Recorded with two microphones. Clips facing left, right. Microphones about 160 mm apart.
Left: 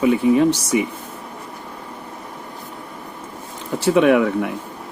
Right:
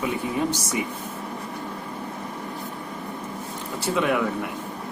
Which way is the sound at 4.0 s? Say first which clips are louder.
Left 9 dB; 70° left (ahead or behind).